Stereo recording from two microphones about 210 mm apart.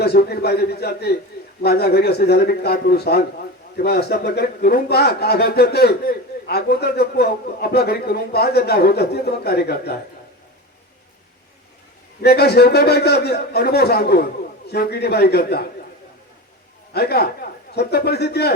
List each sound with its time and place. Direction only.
0.0 s a man's voice: 50° left (ahead or behind)
12.2 s a man's voice: 50° left (ahead or behind)
16.9 s a man's voice: 50° left (ahead or behind)